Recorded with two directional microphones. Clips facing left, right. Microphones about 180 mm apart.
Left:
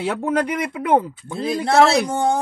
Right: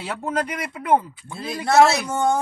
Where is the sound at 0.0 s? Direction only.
60° left (ahead or behind).